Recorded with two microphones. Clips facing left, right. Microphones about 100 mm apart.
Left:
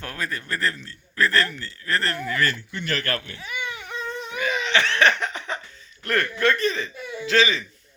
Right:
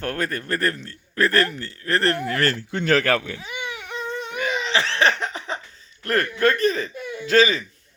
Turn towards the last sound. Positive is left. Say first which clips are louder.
# right 3 dB
turn(degrees=-45)  # may be behind; listen again after turning